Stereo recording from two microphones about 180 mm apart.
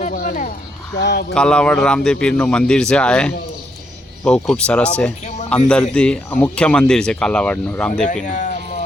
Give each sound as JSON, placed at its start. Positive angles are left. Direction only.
{"t": 0.0, "sound": "a sound", "side_deg": 50}
{"t": 0.9, "sound": "speech", "side_deg": 70}
{"t": 1.3, "sound": "speech", "side_deg": 5}
{"t": 8.0, "sound": "speech", "side_deg": 45}